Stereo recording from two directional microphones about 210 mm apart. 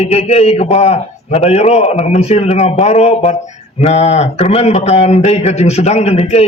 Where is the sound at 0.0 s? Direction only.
30° left (ahead or behind).